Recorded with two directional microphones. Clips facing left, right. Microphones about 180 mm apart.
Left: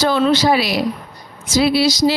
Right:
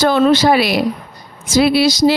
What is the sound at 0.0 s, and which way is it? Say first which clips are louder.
Speech: right 3 dB; 50° right (ahead or behind).